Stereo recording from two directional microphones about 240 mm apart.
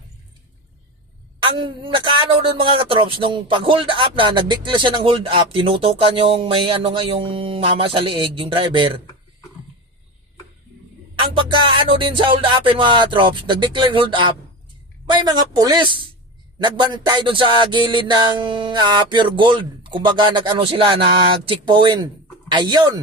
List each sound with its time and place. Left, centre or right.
1.4 s a man's voice: right
11.2 s a man's voice: right